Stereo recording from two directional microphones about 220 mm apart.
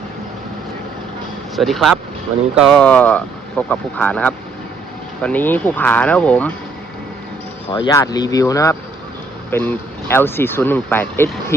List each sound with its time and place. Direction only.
1.5 s speech: centre (ahead or behind)
7.7 s speech: 20° left (ahead or behind)